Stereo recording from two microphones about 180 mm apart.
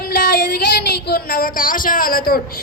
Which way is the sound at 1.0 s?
60° left (ahead or behind).